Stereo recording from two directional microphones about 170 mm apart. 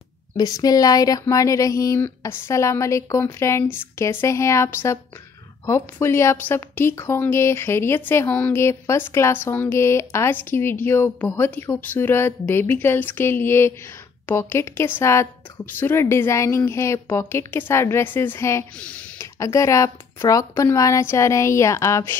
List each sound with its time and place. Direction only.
0.4 s a woman's voice: 20° left (ahead or behind)